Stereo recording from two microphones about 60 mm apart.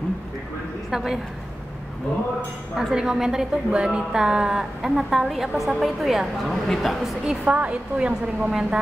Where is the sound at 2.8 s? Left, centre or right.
Centre.